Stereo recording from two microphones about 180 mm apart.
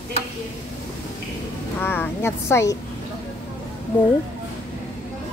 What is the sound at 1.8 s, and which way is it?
Speech, 10° left (ahead or behind).